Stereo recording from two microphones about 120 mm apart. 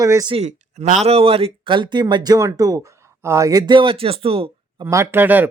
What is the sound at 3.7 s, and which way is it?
Speech, 50° right (ahead or behind).